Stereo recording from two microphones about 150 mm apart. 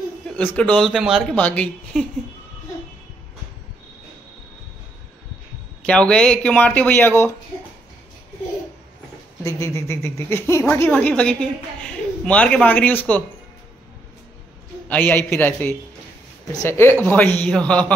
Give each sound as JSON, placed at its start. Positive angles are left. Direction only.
{"t": 0.4, "sound": "speech", "side_deg": 10}
{"t": 5.9, "sound": "speech", "side_deg": 5}
{"t": 9.4, "sound": "a man's voice", "side_deg": 20}
{"t": 14.9, "sound": "speech", "side_deg": 10}